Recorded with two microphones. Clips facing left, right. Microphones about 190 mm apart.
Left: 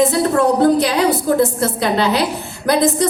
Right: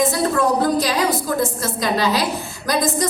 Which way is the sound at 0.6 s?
60° left (ahead or behind).